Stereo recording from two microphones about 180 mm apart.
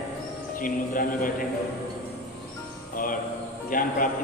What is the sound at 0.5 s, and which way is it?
Speech, 50° left (ahead or behind).